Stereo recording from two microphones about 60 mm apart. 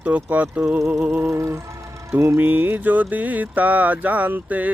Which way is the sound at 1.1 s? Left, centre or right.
Right.